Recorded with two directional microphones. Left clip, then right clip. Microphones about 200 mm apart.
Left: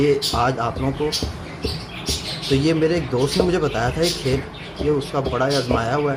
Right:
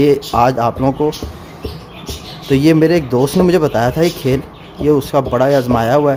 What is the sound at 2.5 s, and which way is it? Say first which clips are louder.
Speech: right 8 dB; 55° right (ahead or behind).